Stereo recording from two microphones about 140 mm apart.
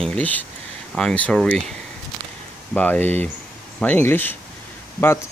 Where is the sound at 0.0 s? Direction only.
10° left (ahead or behind).